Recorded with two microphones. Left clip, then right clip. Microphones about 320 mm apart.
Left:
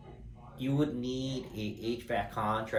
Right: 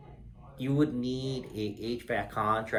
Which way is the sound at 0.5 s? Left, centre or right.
Centre.